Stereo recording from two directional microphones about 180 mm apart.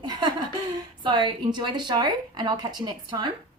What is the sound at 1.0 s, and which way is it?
A woman's voice, 25° right (ahead or behind).